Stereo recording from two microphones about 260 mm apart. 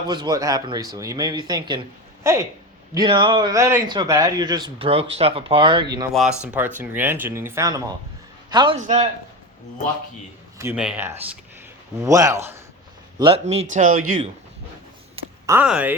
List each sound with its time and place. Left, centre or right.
0.1 s a man's voice: centre
6.1 s a man's voice: centre; by 9.0 s right
10.6 s a man's voice: centre; by 14.0 s right
15.4 s a man's voice: centre